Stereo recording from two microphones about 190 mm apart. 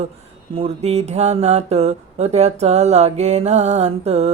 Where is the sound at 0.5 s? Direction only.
30° right (ahead or behind).